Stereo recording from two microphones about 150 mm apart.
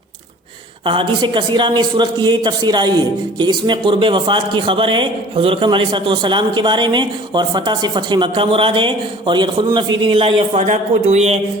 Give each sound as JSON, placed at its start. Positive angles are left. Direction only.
{"t": 0.9, "sound": "a man's voice", "side_deg": -35}